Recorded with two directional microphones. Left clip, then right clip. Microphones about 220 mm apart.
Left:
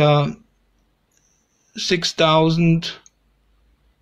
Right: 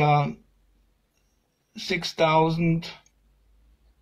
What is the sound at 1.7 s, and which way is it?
Speech, 25° left (ahead or behind).